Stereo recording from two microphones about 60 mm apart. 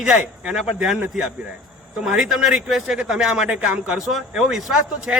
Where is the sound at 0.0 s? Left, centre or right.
Centre.